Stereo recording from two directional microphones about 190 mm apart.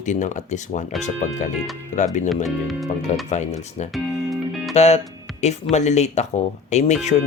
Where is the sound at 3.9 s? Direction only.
Centre (ahead or behind).